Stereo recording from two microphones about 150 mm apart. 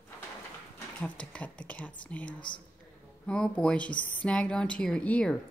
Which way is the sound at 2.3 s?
30° left (ahead or behind).